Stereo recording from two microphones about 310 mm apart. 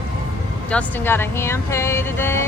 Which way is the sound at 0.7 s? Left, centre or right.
Centre.